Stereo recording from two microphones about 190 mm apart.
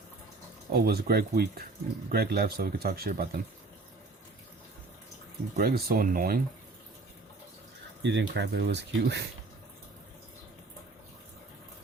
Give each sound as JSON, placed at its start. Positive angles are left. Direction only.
{"t": 0.7, "sound": "speech", "side_deg": -55}
{"t": 5.5, "sound": "speech", "side_deg": -55}
{"t": 8.0, "sound": "speech", "side_deg": -65}